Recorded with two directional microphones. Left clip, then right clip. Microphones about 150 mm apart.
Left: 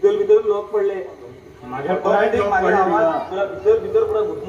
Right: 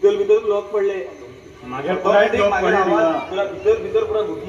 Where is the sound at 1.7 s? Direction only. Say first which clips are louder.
Right 1 dB; 10° right (ahead or behind).